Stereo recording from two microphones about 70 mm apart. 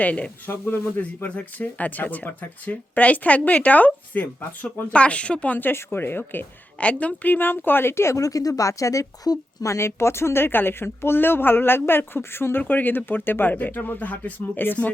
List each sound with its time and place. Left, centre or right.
0.0 s speech: centre
0.4 s speech: left
6.7 s speech: centre; by 9.7 s left
9.7 s speech: left